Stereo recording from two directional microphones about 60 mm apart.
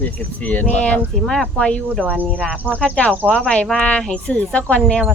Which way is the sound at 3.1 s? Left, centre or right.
Right.